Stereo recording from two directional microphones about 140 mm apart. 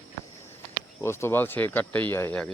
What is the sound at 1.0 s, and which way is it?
Speech, 20° left (ahead or behind).